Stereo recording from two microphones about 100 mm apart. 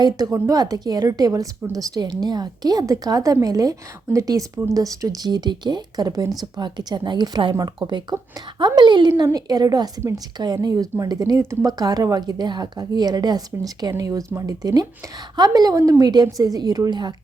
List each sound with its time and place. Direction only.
0.3 s speech: 25° right (ahead or behind)
0.5 s a woman's voice: 40° right (ahead or behind)